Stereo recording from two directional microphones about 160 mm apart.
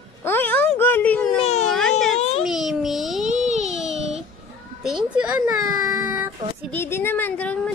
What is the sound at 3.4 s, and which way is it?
Music, 45° right (ahead or behind).